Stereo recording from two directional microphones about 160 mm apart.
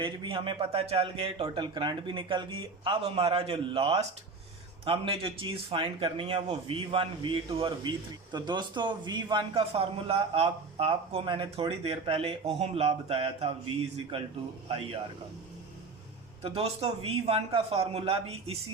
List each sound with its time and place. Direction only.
0.0 s a man's voice: 30° right (ahead or behind)
16.4 s a man's voice: 40° right (ahead or behind)